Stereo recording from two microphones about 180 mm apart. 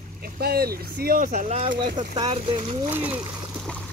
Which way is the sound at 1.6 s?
25° right (ahead or behind).